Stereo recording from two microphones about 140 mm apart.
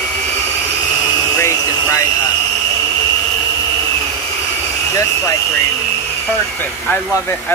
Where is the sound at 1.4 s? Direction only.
20° left (ahead or behind).